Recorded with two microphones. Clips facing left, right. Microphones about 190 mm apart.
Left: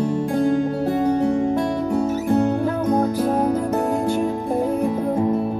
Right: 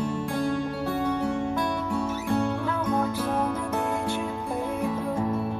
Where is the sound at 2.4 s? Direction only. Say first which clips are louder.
Left 7 dB; 40° left (ahead or behind).